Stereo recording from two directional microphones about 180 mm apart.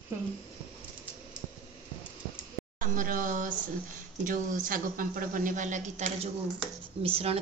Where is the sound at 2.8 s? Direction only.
50° right (ahead or behind); by 7.4 s 30° right (ahead or behind).